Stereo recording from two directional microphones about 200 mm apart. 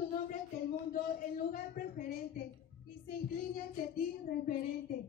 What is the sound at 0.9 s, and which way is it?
Speech, 45° left (ahead or behind).